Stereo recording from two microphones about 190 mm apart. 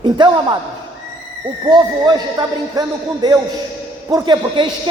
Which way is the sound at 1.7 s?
20° right (ahead or behind).